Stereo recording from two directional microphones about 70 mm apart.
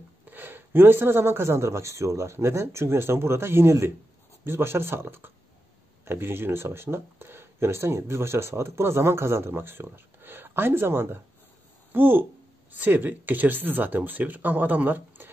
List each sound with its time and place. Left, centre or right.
0.2 s speech: right